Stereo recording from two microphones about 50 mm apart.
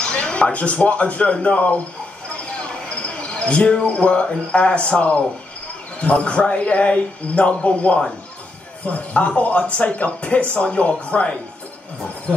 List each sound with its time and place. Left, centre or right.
0.0 s speech: centre
2.2 s a sound: left
5.9 s speech: left